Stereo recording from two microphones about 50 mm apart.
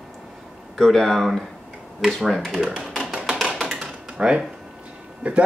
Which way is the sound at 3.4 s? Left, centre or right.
Centre.